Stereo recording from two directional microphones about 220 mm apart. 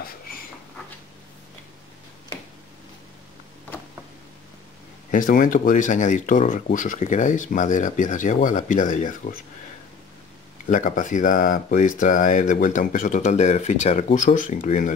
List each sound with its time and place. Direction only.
5.1 s speech: 40° left (ahead or behind)
10.7 s speech: 35° left (ahead or behind)